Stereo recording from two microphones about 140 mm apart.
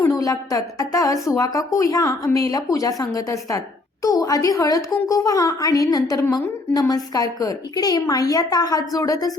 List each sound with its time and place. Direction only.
0.0 s a woman's voice: 25° left (ahead or behind)